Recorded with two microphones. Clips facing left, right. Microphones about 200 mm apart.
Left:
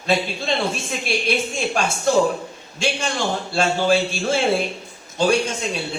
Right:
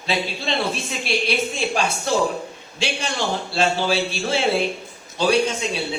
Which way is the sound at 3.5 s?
50° left (ahead or behind).